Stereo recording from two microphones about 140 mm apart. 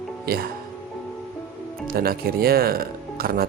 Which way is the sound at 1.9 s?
90° right.